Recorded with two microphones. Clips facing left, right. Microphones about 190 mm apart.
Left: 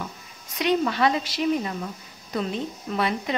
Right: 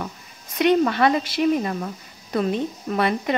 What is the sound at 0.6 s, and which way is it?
A woman's voice, 55° right (ahead or behind).